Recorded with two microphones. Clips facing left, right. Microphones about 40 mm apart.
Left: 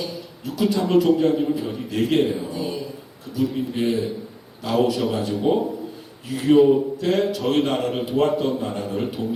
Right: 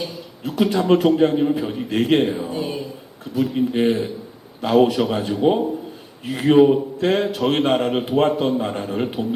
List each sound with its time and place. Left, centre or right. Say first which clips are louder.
0.0 s a man's voice: right 2 dB; right